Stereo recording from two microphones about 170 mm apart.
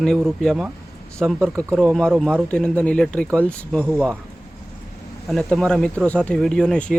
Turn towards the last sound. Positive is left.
turn(degrees=5)  # may be behind; listen again after turning